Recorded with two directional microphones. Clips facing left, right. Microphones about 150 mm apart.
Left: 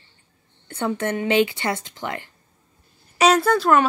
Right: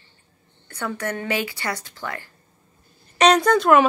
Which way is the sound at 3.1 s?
5° left (ahead or behind).